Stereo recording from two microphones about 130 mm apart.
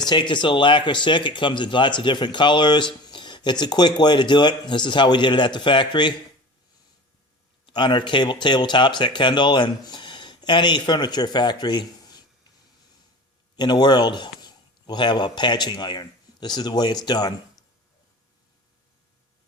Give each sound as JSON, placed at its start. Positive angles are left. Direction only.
{"t": 0.0, "sound": "speech", "side_deg": 35}
{"t": 7.7, "sound": "speech", "side_deg": 35}
{"t": 13.6, "sound": "a man's voice", "side_deg": 35}